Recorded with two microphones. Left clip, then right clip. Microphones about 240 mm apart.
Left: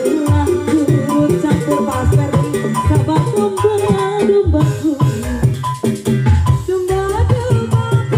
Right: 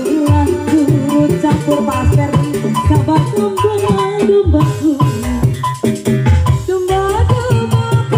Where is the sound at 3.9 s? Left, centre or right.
Right.